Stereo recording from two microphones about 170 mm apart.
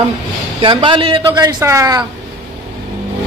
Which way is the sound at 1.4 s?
15° right (ahead or behind).